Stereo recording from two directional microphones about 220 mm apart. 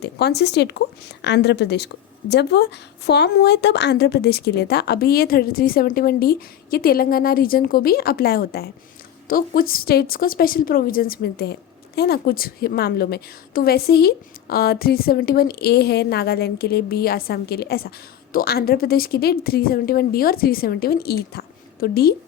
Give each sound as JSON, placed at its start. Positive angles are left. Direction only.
{"t": 0.0, "sound": "a woman's voice", "side_deg": 50}